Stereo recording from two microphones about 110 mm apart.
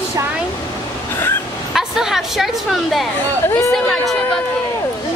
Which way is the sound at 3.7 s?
Centre (ahead or behind).